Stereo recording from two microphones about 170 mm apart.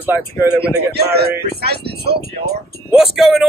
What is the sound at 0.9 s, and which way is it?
Speech, 70° right (ahead or behind).